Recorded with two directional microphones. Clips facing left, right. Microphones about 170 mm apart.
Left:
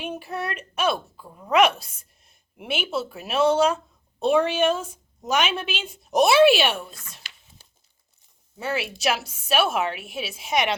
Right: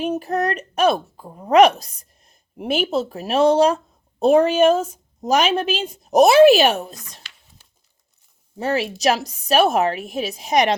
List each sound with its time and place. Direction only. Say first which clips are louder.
0.0 s a woman's voice: right 9 dB; 40° right (ahead or behind)
8.5 s a woman's voice: right 6 dB; 40° right (ahead or behind)